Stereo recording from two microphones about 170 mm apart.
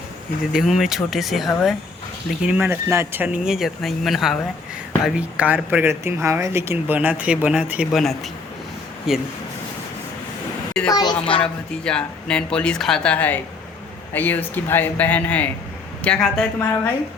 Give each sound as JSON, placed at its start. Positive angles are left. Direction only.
{"t": 0.5, "sound": "speech", "side_deg": 0}
{"t": 10.8, "sound": "a woman's voice", "side_deg": 25}
{"t": 11.9, "sound": "speech", "side_deg": 5}